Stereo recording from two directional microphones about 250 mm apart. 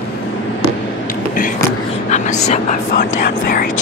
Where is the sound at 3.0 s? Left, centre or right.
Left.